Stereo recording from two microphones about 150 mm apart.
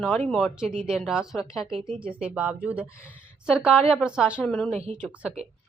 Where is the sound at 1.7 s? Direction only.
35° right (ahead or behind).